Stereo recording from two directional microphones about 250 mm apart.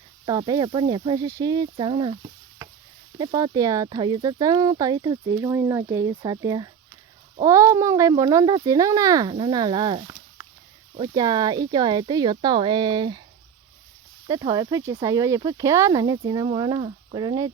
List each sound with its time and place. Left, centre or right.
0.3 s speech: centre
3.2 s speech: centre
14.3 s speech: centre